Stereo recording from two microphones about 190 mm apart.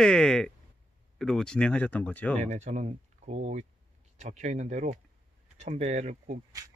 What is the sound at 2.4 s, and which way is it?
Speech, 40° right (ahead or behind).